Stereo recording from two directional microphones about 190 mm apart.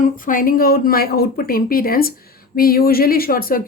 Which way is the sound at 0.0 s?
45° left (ahead or behind).